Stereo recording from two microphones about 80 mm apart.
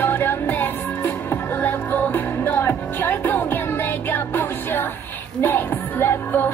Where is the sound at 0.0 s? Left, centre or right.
Left.